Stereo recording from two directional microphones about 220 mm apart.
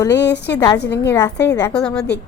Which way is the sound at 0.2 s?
50° left (ahead or behind).